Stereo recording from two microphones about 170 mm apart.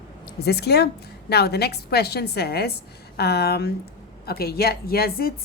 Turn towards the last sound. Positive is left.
turn(degrees=65)  # may be behind; listen again after turning